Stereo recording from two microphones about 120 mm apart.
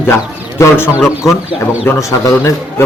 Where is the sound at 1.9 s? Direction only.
25° left (ahead or behind).